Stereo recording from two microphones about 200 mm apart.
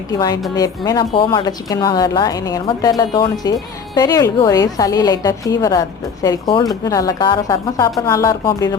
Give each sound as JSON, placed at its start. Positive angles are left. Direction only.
{"t": 0.1, "sound": "a woman's voice", "side_deg": 20}